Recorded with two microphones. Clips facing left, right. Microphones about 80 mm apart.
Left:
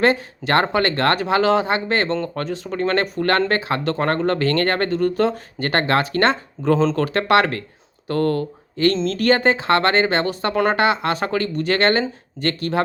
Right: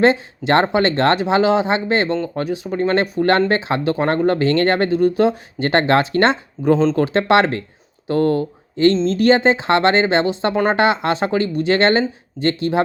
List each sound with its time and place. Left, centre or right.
0.0 s speech: right
6.6 s speech: centre
6.9 s speech: right